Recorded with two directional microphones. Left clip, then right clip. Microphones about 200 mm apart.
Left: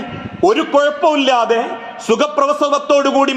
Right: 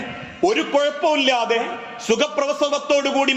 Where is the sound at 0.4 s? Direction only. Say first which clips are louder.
Left 6 dB; 35° left (ahead or behind).